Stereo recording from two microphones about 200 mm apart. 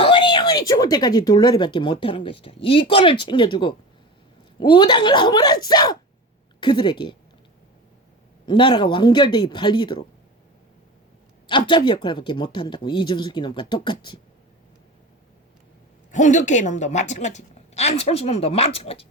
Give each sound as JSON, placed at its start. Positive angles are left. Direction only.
{"t": 0.0, "sound": "a woman's voice", "side_deg": 25}
{"t": 8.4, "sound": "a woman's voice", "side_deg": 25}
{"t": 11.4, "sound": "a woman's voice", "side_deg": 25}
{"t": 16.1, "sound": "a woman's voice", "side_deg": 35}